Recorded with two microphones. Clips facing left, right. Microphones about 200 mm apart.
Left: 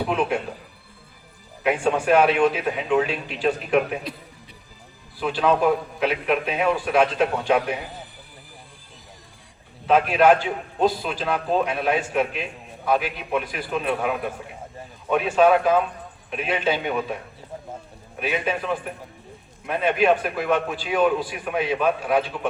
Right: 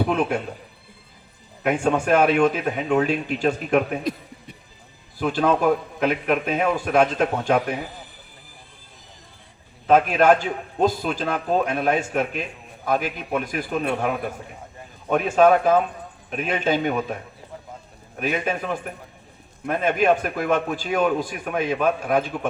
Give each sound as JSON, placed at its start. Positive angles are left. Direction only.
{"t": 0.0, "sound": "a man's voice", "side_deg": -45}
{"t": 1.6, "sound": "a man's voice", "side_deg": -45}
{"t": 9.8, "sound": "a man's voice", "side_deg": -45}
{"t": 15.1, "sound": "a man's voice", "side_deg": -45}
{"t": 18.2, "sound": "a man's voice", "side_deg": -45}